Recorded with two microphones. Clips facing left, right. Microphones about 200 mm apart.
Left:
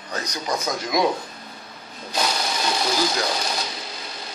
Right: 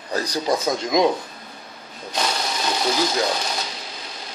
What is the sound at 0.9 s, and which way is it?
Speech, 20° right (ahead or behind).